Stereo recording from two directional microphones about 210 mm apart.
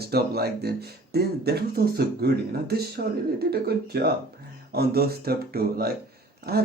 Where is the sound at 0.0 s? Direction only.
50° right (ahead or behind).